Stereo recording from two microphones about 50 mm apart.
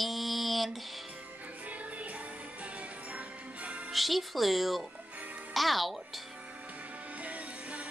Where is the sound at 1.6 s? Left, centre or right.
Right.